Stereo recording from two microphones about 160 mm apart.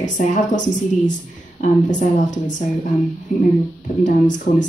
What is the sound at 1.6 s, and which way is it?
Speech, 50° left (ahead or behind).